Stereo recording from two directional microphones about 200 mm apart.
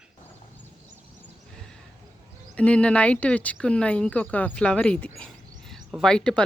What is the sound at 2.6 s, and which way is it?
Speech, 5° left (ahead or behind).